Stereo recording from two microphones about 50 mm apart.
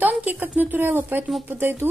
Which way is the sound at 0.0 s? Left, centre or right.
Right.